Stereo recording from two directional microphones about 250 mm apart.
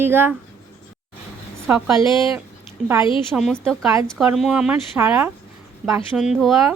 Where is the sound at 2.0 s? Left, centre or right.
Centre.